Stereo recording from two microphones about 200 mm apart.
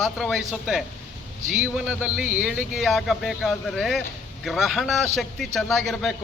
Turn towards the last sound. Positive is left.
turn(degrees=0)  # may be behind; listen again after turning